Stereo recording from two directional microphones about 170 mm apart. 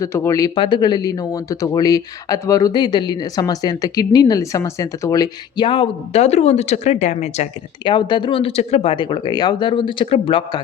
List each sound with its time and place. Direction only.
0.0 s speech: 15° left (ahead or behind); by 7.4 s 40° left (ahead or behind)
7.9 s speech: 25° left (ahead or behind)